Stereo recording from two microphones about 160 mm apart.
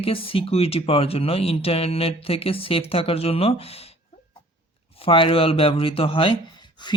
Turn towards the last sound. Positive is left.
turn(degrees=25)  # may be behind; listen again after turning